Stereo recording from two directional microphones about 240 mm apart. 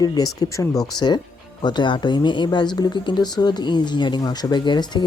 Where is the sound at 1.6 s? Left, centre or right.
Centre.